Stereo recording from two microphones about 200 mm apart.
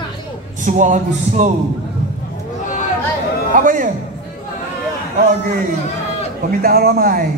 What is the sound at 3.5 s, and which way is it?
Speech, 40° right (ahead or behind).